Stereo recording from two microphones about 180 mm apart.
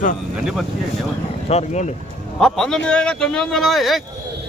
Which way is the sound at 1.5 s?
35° left (ahead or behind).